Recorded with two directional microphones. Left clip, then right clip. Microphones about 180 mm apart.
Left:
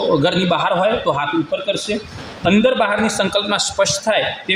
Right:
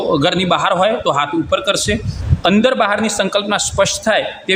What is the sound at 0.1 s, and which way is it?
A man's voice, centre (ahead or behind).